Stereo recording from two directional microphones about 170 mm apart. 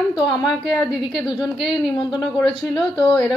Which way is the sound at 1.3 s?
5° right (ahead or behind).